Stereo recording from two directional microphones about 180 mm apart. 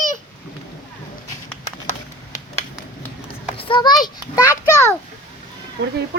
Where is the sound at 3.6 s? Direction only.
25° left (ahead or behind).